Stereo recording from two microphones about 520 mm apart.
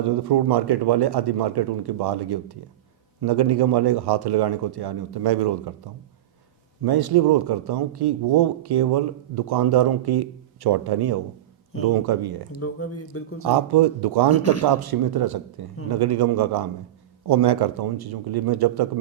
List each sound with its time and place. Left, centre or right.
0.0 s speech: right
12.5 s speech: left
13.4 s speech: right
14.3 s speech: left
14.8 s speech: right